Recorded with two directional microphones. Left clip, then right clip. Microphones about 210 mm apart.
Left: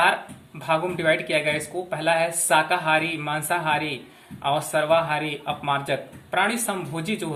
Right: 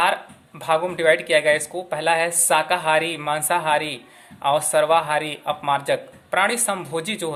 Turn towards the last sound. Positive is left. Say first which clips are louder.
# right 3 dB
turn(degrees=-50)  # may be behind; listen again after turning